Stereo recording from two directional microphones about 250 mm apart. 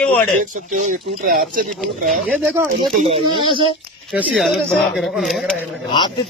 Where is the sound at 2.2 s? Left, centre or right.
Centre.